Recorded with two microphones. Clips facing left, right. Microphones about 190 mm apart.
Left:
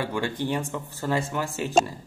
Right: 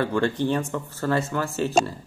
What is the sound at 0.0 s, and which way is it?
Speech, 10° left (ahead or behind).